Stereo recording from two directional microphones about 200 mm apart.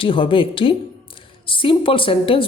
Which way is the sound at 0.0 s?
25° left (ahead or behind).